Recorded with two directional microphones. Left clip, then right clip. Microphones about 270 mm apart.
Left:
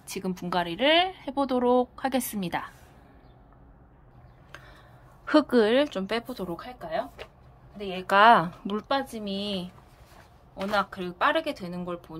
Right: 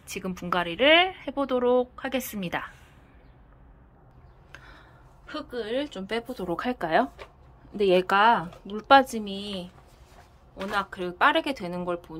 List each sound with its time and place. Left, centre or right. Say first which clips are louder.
0.0 s a woman's voice: left 1 dB; centre
5.2 s a woman's voice: left 13 dB; centre
7.7 s speech: right 13 dB; right
8.1 s a woman's voice: left 3 dB; centre
10.7 s a woman's voice: left 1 dB; centre